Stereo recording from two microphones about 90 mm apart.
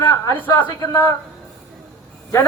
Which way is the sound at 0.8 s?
35° left (ahead or behind).